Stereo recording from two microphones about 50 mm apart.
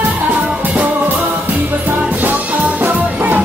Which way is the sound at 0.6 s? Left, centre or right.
Right.